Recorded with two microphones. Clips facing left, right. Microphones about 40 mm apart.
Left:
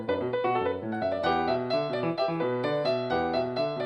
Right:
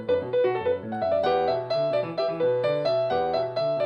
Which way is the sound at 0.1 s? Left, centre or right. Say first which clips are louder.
Right 4 dB; centre.